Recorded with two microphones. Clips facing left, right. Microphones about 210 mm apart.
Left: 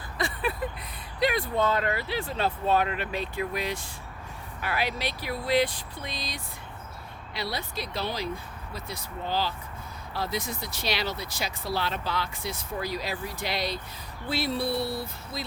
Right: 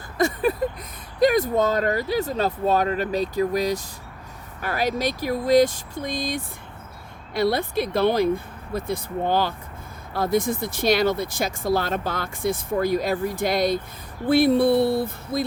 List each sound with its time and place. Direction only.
0.2 s speech: 45° right (ahead or behind)